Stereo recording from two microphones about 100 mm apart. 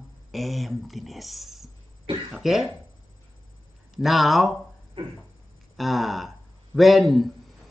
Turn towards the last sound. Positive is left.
turn(degrees=0)  # may be behind; listen again after turning